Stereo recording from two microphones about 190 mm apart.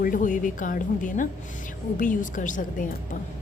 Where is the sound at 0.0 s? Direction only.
45° left (ahead or behind).